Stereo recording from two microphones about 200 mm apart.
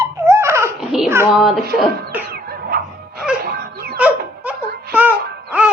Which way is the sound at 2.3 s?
50° right (ahead or behind).